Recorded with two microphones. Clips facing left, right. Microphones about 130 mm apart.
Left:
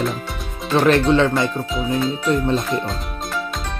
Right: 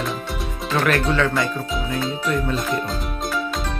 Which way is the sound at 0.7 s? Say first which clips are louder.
Left 5 dB; 25° left (ahead or behind).